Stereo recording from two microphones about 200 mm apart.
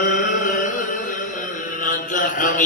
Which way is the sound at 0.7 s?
40° left (ahead or behind).